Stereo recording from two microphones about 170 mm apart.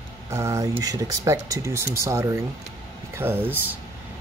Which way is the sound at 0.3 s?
15° right (ahead or behind).